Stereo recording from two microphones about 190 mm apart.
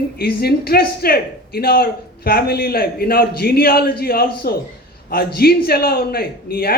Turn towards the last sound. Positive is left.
turn(degrees=55)  # may be behind; listen again after turning